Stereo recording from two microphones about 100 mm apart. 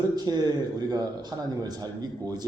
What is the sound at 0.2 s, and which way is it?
A man's voice, 40° right (ahead or behind).